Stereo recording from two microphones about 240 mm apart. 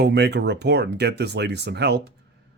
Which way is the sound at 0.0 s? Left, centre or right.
Right.